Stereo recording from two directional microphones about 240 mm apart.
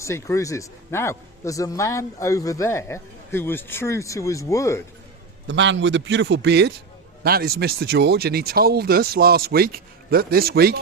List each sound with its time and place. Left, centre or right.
0.0 s a man's voice: centre
5.5 s a man's voice: right